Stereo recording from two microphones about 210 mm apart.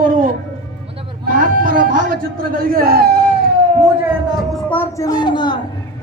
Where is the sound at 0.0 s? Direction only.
40° right (ahead or behind).